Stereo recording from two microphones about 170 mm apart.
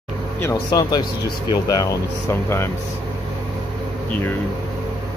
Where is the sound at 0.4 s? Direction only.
20° left (ahead or behind).